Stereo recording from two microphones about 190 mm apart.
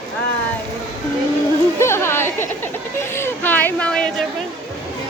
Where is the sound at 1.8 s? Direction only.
15° left (ahead or behind).